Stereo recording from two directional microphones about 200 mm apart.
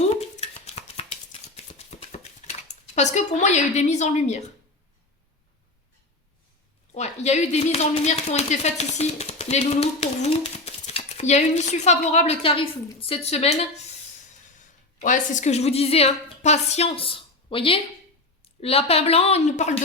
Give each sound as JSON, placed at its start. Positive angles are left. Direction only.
{"t": 0.3, "sound": "a sound", "side_deg": 35}
{"t": 6.9, "sound": "speech", "side_deg": 35}
{"t": 15.0, "sound": "speech", "side_deg": 40}